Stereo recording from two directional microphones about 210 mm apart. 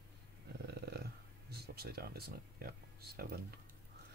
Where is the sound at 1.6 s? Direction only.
50° right (ahead or behind).